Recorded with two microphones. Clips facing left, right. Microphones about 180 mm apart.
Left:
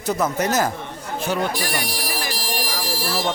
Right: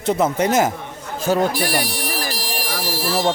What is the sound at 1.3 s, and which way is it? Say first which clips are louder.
Speech: right 6 dB; 40° right (ahead or behind).